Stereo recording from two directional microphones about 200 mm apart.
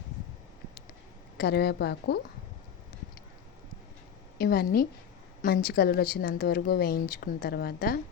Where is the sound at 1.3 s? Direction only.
55° left (ahead or behind).